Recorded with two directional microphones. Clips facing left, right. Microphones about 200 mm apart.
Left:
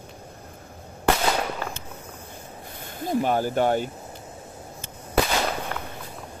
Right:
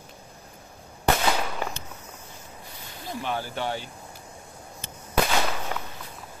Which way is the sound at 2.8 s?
50° left (ahead or behind).